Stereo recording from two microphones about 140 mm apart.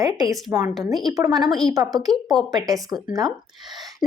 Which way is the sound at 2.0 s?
Centre (ahead or behind).